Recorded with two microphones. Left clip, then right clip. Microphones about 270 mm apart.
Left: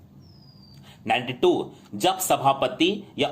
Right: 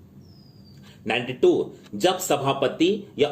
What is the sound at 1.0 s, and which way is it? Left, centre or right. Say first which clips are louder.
Speech: right 1 dB; left.